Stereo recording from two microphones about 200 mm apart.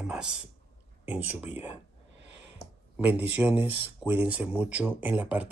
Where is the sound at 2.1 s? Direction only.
60° right (ahead or behind).